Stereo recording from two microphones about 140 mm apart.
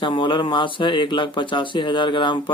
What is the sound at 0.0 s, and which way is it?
Speech, 35° left (ahead or behind).